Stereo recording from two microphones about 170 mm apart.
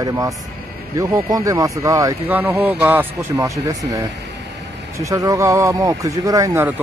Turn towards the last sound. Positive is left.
turn(degrees=-15)  # may be behind; listen again after turning